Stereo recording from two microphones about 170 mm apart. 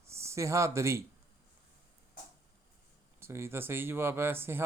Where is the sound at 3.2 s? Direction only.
15° right (ahead or behind).